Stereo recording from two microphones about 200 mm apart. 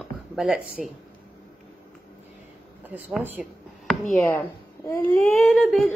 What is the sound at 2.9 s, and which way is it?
A woman's voice, 5° right (ahead or behind).